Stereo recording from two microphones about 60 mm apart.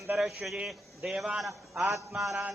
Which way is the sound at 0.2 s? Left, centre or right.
Centre.